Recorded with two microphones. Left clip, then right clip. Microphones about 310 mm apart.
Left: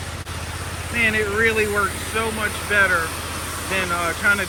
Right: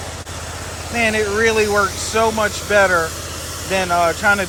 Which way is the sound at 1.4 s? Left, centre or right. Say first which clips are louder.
Right 6 dB; centre.